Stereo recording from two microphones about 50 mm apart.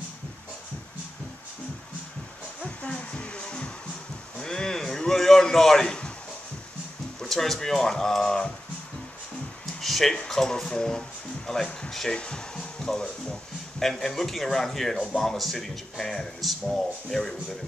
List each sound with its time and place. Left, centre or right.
2.6 s music: left
4.4 s a sound: centre
7.2 s speech: centre
9.8 s speech: centre
12.2 s speech: centre